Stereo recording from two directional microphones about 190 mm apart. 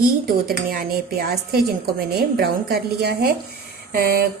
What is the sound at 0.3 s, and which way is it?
A woman's voice, 50° right (ahead or behind).